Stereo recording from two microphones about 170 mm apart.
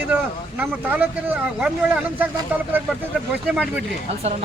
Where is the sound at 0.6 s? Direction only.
10° right (ahead or behind).